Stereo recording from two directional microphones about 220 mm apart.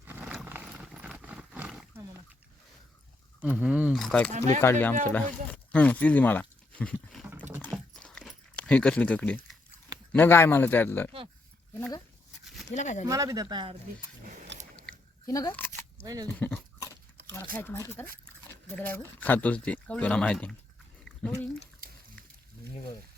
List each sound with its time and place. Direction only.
0.3 s horse: 5° right (ahead or behind)
3.4 s speech: 5° right (ahead or behind)
7.6 s a sound: 5° left (ahead or behind)
10.1 s speech: 10° left (ahead or behind)
12.7 s speech: 35° left (ahead or behind)
13.1 s speech: 15° right (ahead or behind)
14.5 s biting: 55° right (ahead or behind)
15.3 s a sound: 15° left (ahead or behind)
16.0 s speech: 15° right (ahead or behind)
16.4 s dog: 10° left (ahead or behind)
17.2 s a sound: 50° right (ahead or behind)
17.5 s speech: 10° left (ahead or behind)